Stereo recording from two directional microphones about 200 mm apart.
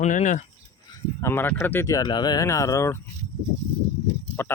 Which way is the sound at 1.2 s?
10° left (ahead or behind).